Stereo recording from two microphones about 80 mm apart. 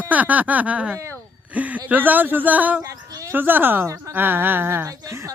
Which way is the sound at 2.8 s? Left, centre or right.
Right.